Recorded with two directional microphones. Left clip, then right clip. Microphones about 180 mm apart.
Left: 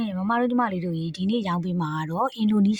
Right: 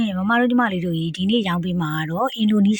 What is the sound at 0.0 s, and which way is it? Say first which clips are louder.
Speech: right 5 dB; 15° right (ahead or behind).